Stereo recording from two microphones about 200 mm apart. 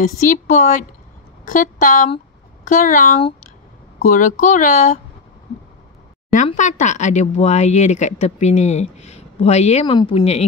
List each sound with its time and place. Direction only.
0.0 s speech: 40° left (ahead or behind)
6.3 s speech: 40° left (ahead or behind)